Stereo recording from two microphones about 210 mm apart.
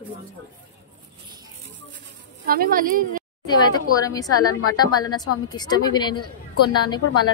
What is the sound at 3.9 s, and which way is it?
A woman's voice, 15° left (ahead or behind).